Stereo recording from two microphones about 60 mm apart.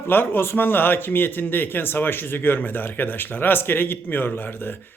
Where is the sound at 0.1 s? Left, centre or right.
Left.